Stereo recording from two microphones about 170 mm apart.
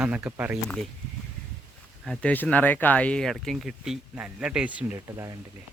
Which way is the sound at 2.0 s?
5° left (ahead or behind).